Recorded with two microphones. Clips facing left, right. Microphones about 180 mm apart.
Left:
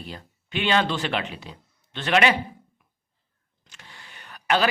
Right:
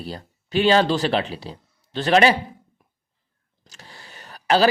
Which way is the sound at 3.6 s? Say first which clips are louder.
Right 4 dB; 40° right (ahead or behind).